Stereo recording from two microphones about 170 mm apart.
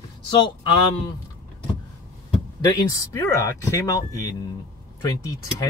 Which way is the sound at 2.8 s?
20° left (ahead or behind).